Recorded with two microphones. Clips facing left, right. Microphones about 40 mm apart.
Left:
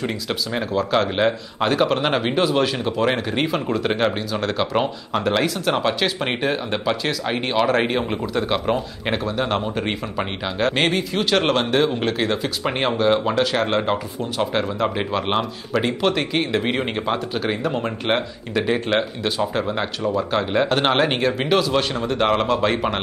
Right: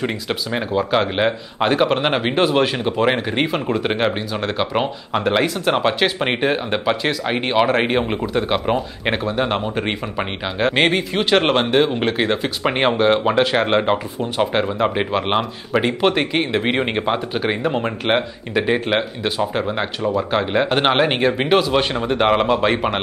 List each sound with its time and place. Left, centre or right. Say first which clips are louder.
0.0 s speech: right 2 dB; centre